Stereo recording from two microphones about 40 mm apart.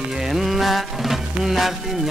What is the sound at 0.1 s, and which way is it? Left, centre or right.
Music, centre.